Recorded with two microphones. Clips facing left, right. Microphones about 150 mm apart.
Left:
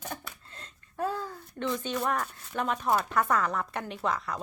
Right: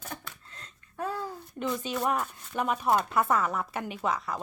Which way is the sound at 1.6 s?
10° right (ahead or behind).